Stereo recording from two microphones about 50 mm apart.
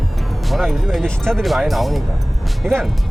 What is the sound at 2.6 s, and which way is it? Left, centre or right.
Speech, right.